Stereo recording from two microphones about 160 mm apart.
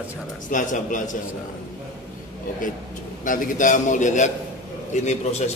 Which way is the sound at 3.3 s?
55° left (ahead or behind).